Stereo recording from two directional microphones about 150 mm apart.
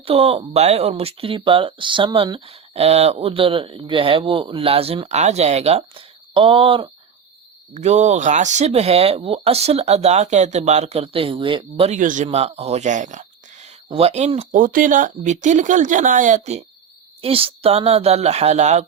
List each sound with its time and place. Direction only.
0.0 s speech: 40° right (ahead or behind)
7.7 s speech: 50° right (ahead or behind); by 11.9 s 35° right (ahead or behind)
11.9 s speech: 60° right (ahead or behind)
14.5 s speech: 65° right (ahead or behind)
17.2 s speech: 40° right (ahead or behind)